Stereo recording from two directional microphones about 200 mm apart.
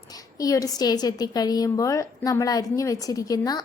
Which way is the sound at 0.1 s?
20° left (ahead or behind).